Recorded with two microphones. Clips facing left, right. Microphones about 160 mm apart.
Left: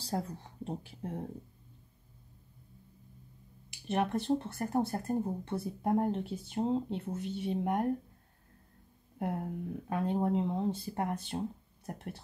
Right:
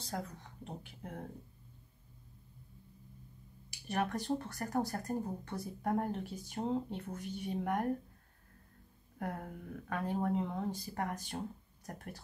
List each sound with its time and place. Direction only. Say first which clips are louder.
0.0 s speech: left 5 dB; 30° left (ahead or behind)
3.8 s speech: left 4 dB; 25° left (ahead or behind)
9.2 s speech: left 6 dB; 25° left (ahead or behind)